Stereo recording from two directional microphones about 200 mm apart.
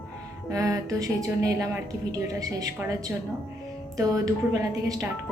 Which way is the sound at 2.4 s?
15° right (ahead or behind).